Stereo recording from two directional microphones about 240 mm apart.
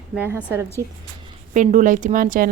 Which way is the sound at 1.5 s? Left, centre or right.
Right.